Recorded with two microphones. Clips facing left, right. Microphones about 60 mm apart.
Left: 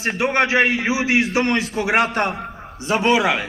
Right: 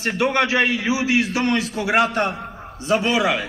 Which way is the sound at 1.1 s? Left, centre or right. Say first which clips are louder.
Left 2 dB; left.